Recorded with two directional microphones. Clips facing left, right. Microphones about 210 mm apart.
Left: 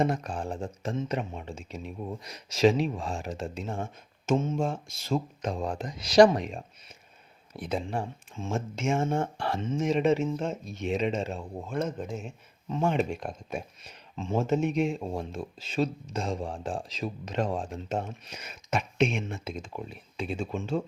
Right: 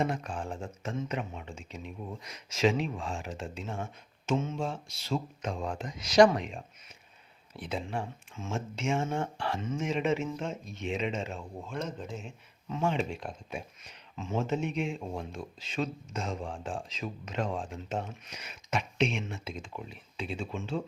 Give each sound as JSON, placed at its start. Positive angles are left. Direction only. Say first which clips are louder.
{"t": 0.0, "sound": "speech", "louder": "left 4 dB", "side_deg": 40}
{"t": 9.6, "sound": "speech", "louder": "left 4 dB", "side_deg": 25}
{"t": 9.8, "sound": "speech", "louder": "left 6 dB", "side_deg": 35}
{"t": 11.7, "sound": "speech", "louder": "left 6 dB", "side_deg": 50}
{"t": 12.6, "sound": "speech", "louder": "left 3 dB", "side_deg": 35}
{"t": 12.9, "sound": "speech", "louder": "left 4 dB", "side_deg": 45}